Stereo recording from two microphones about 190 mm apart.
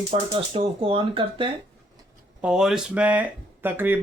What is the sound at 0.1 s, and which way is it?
Speech, 30° right (ahead or behind).